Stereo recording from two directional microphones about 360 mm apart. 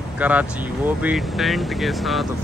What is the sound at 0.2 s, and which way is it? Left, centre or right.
Speech, centre.